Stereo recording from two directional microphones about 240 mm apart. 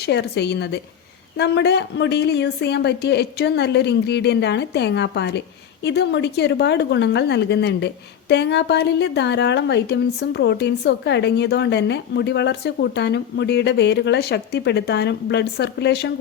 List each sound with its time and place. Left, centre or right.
0.0 s a woman's voice: left